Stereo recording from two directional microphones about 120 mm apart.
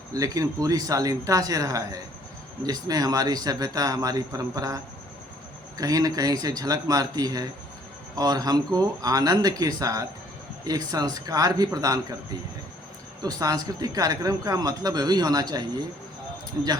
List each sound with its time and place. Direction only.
0.1 s a man's voice: 30° right (ahead or behind)
13.2 s a man's voice: 30° right (ahead or behind)